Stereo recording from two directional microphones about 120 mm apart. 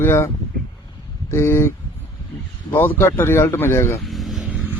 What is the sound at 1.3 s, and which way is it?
A man's voice, 20° left (ahead or behind).